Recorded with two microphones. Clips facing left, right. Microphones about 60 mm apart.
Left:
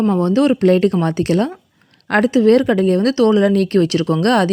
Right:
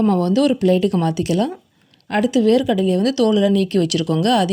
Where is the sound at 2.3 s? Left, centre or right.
Left.